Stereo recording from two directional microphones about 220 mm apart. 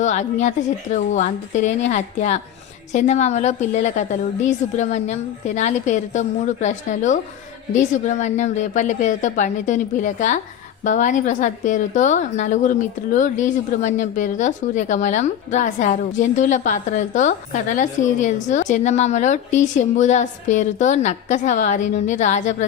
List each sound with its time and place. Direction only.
0.0 s speech: 30° left (ahead or behind)